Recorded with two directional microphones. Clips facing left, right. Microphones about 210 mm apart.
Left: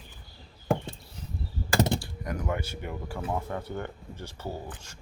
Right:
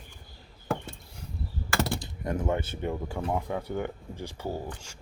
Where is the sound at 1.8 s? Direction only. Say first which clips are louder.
Left 4 dB; 20° left (ahead or behind).